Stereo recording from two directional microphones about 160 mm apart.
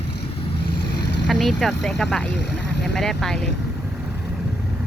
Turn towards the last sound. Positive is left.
turn(degrees=5)  # may be behind; listen again after turning